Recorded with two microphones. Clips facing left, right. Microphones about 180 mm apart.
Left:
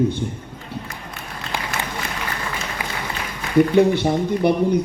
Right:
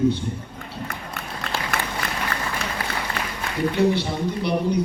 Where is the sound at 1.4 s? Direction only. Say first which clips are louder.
Left 1 dB; 60° right (ahead or behind).